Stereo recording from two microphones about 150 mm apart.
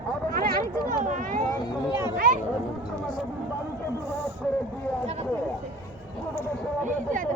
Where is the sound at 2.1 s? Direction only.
70° right (ahead or behind).